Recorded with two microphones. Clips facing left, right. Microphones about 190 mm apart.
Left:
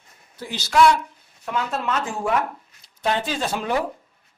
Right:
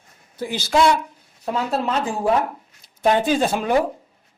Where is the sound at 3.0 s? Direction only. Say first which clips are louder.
Right 6 dB; 45° right (ahead or behind).